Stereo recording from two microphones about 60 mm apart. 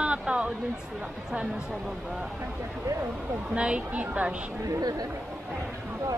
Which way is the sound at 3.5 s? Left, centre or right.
Centre.